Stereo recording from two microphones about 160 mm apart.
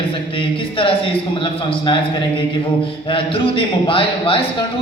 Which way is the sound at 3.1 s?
35° left (ahead or behind).